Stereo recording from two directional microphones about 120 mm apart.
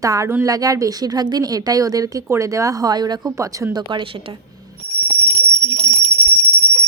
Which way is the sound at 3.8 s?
45° right (ahead or behind).